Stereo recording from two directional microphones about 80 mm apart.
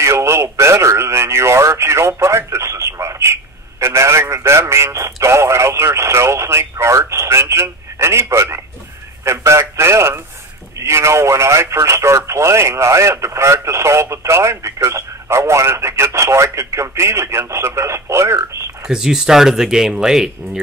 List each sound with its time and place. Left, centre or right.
0.0 s speech: right
18.9 s speech: centre